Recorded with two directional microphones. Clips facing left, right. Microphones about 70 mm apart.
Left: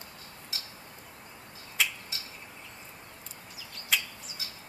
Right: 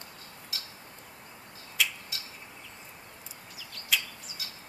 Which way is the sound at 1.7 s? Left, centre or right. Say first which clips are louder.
Even; left.